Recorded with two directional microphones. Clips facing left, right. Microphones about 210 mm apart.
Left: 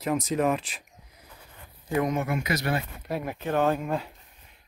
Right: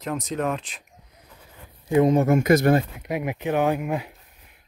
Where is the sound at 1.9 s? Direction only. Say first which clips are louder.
Right 8 dB; 25° right (ahead or behind).